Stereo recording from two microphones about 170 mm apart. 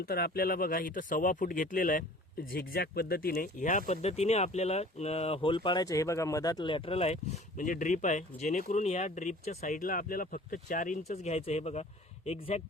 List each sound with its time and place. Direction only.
0.0 s speech: 65° left (ahead or behind)
2.5 s speech: 65° left (ahead or behind); by 12.6 s 35° left (ahead or behind)